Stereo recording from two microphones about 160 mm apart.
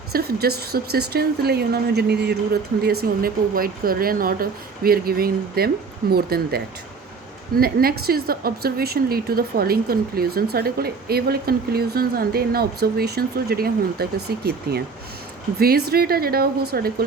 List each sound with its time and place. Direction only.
0.1 s a woman's voice: 80° right